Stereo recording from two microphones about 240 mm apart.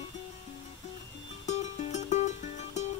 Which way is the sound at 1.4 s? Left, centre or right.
Left.